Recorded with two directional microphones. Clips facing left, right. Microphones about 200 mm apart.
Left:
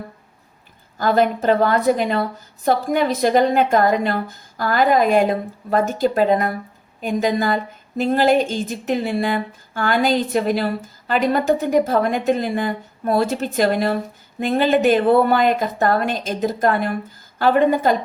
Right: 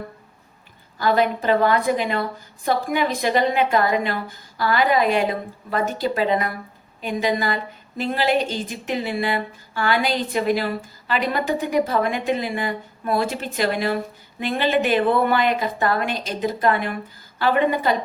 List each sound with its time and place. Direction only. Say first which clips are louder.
0.9 s speech: left 2 dB; 45° left (ahead or behind)